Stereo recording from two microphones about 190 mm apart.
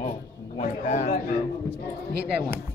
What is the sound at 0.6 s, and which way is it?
Speech, 35° left (ahead or behind).